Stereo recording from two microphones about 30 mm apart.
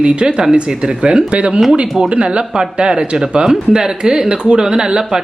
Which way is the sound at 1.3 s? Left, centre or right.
Right.